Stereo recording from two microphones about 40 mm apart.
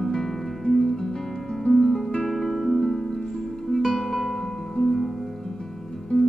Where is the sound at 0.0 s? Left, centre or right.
Centre.